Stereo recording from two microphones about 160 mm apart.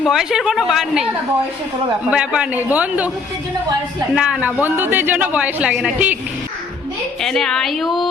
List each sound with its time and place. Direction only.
0.0 s a woman's voice: centre (ahead or behind)
2.0 s a woman's voice: 5° right (ahead or behind)
4.1 s a woman's voice: 5° right (ahead or behind)
7.2 s a woman's voice: centre (ahead or behind)